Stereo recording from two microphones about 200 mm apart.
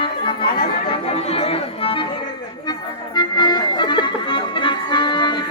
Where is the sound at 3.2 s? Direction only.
20° left (ahead or behind).